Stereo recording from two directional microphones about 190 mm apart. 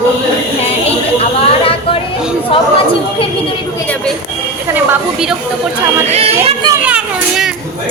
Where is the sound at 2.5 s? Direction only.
30° left (ahead or behind).